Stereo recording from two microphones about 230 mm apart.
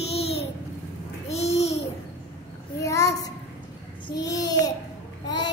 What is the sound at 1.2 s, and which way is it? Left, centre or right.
Babbling, left.